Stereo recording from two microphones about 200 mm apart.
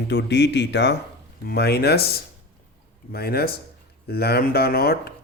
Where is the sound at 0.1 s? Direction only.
60° left (ahead or behind).